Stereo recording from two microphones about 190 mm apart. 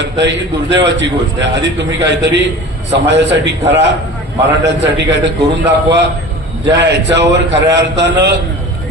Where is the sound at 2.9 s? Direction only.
70° right (ahead or behind).